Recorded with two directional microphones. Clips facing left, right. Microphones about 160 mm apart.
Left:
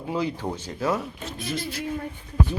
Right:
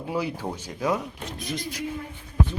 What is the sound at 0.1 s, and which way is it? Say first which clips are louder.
Speech: left 2 dB; 10° right (ahead or behind).